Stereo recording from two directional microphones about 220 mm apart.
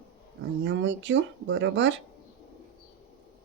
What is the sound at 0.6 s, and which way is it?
Speech, 55° right (ahead or behind).